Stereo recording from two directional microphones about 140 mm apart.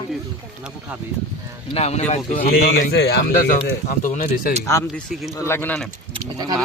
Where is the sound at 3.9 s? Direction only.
80° left.